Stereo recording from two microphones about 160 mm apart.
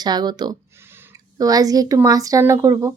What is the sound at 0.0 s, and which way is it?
Speech, 25° right (ahead or behind).